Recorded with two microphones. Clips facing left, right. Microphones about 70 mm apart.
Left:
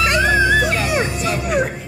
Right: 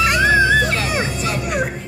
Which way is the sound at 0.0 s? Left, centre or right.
Centre.